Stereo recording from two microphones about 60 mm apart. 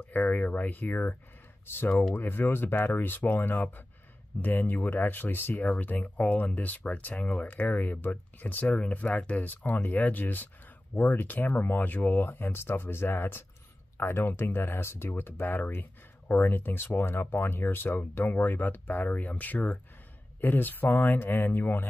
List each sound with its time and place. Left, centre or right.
0.1 s speech: left
2.1 s speech: left